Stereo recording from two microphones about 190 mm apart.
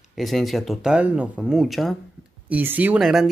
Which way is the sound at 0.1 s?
Centre (ahead or behind).